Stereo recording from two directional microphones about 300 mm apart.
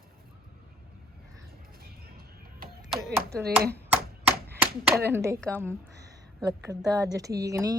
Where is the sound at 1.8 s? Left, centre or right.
Right.